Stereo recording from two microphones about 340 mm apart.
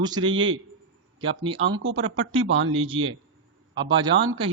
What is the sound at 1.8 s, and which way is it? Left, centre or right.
Speech, right.